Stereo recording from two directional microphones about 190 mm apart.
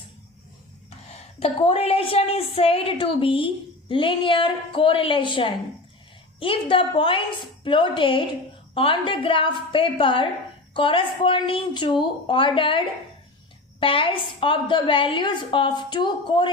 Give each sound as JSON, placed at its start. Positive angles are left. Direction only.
{"t": 1.4, "sound": "a woman's voice", "side_deg": 30}